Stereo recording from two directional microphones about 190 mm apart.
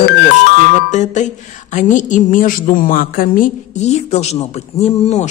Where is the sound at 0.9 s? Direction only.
40° left (ahead or behind).